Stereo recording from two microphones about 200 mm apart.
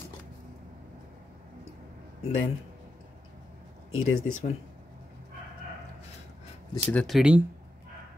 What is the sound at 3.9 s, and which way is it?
Speech, 90° left.